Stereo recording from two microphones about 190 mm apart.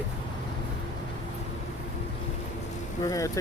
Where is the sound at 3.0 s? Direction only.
20° left (ahead or behind).